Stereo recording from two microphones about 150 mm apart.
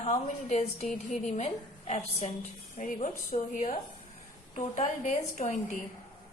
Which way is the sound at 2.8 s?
60° left (ahead or behind).